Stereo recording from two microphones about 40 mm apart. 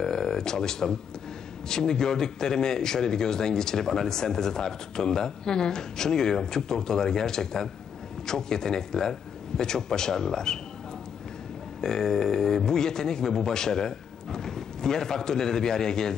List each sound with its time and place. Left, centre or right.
0.0 s a man's voice: centre
11.8 s a man's voice: centre